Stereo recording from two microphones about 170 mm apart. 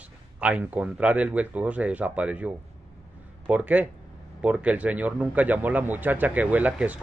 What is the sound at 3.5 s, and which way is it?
Speech, 10° right (ahead or behind).